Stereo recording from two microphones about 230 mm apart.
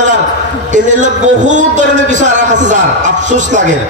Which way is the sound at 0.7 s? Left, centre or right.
Right.